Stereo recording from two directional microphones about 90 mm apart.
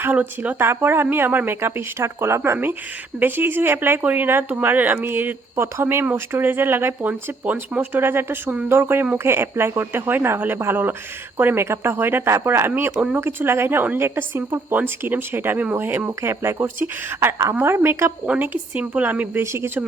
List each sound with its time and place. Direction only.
0.0 s speech: 20° right (ahead or behind)